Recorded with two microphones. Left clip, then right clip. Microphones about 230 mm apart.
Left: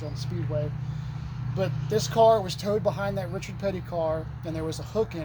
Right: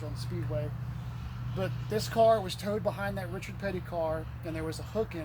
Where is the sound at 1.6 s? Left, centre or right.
Left.